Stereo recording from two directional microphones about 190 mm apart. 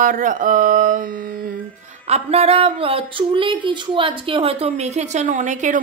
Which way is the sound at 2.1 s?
30° right (ahead or behind).